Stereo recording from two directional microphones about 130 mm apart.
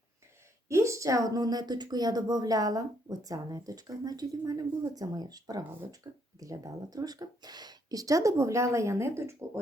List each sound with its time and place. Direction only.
0.7 s a woman's voice: 25° right (ahead or behind)